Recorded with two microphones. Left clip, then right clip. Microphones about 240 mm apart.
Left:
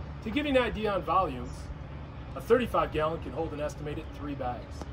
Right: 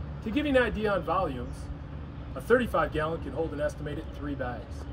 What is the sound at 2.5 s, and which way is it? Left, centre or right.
Speech, centre.